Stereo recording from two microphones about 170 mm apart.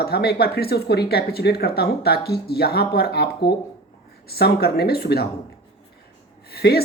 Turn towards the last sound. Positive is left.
turn(degrees=70)  # may be behind; listen again after turning